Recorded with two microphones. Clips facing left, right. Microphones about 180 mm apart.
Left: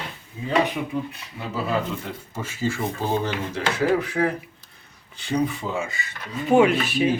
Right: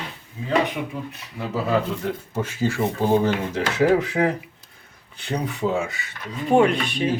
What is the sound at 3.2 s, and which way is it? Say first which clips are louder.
Speech: right 4 dB; 45° right (ahead or behind).